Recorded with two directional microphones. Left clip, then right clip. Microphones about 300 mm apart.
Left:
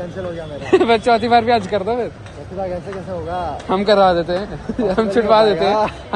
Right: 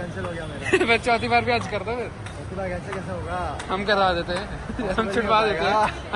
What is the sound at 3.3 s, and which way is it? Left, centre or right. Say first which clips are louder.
Speech: left 7 dB; left.